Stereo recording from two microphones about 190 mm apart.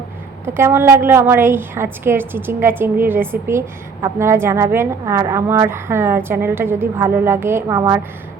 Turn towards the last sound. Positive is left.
turn(degrees=-15)  # may be behind; listen again after turning